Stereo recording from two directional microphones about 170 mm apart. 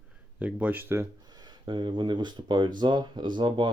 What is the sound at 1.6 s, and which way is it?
Speech, 30° right (ahead or behind).